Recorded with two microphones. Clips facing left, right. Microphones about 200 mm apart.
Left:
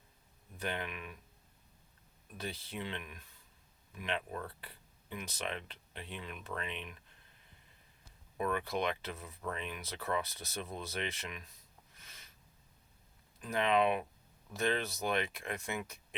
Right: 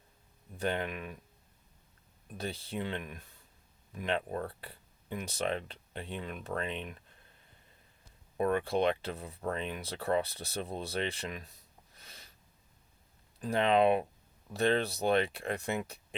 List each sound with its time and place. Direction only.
0.6 s speech: 40° right (ahead or behind)
2.4 s speech: 30° right (ahead or behind)
8.4 s speech: 35° right (ahead or behind)
11.9 s a sound: 35° right (ahead or behind)
13.4 s speech: 30° right (ahead or behind)